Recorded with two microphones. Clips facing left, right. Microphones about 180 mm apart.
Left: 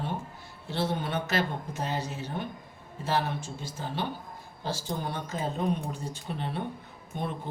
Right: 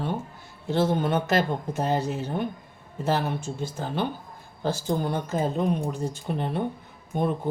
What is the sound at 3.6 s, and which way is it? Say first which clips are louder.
A man's voice: right 7 dB; 50° right (ahead or behind).